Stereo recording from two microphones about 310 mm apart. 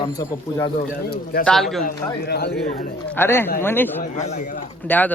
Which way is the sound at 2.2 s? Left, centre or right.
Left.